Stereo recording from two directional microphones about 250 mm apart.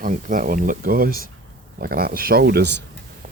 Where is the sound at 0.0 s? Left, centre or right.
Right.